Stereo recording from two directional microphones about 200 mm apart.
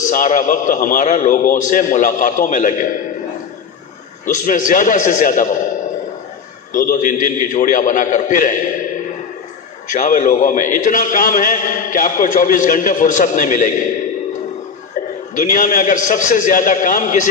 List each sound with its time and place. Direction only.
0.0 s a man's voice: 40° left (ahead or behind)
4.3 s a man's voice: 40° left (ahead or behind)
6.7 s a man's voice: 40° left (ahead or behind)
9.8 s a man's voice: 40° left (ahead or behind)
15.3 s a man's voice: 40° left (ahead or behind)